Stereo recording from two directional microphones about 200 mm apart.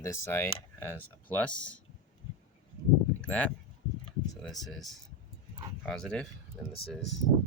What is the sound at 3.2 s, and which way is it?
Speech, 5° left (ahead or behind).